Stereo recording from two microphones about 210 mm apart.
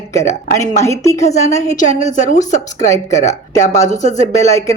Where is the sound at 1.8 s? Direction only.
35° left (ahead or behind).